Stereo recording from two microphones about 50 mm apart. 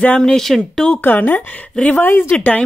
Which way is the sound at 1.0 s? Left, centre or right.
Left.